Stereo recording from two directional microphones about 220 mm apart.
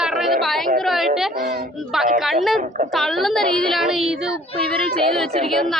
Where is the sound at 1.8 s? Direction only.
Centre (ahead or behind).